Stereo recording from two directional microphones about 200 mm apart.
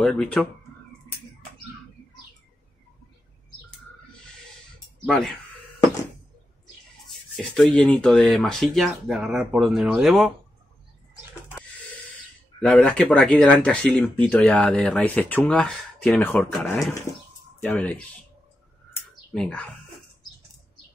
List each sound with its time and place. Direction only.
0.0 s speech: 5° left (ahead or behind)
5.0 s speech: 5° left (ahead or behind)
7.1 s speech: centre (ahead or behind)
12.5 s speech: 5° left (ahead or behind)
18.9 s bird: 5° left (ahead or behind)